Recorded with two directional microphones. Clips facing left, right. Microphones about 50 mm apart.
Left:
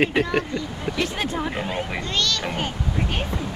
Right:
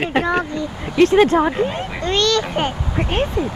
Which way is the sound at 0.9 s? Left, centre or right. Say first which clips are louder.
Right 15 dB; right.